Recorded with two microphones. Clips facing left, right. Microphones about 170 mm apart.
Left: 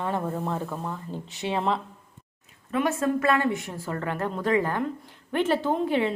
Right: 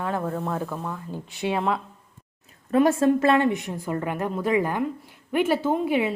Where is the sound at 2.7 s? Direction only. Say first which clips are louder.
Right 6 dB; 35° right (ahead or behind).